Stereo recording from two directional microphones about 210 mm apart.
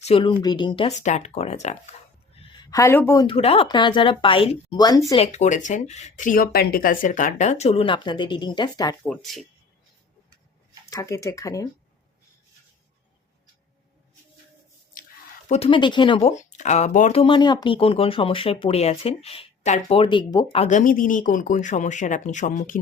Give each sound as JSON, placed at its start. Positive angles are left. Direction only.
{"t": 0.0, "sound": "speech", "side_deg": 25}
{"t": 2.5, "sound": "speech", "side_deg": 20}
{"t": 3.2, "sound": "speech", "side_deg": 30}
{"t": 5.1, "sound": "speech", "side_deg": 30}
{"t": 9.0, "sound": "speech", "side_deg": 0}
{"t": 10.8, "sound": "speech", "side_deg": 15}
{"t": 15.4, "sound": "speech", "side_deg": 30}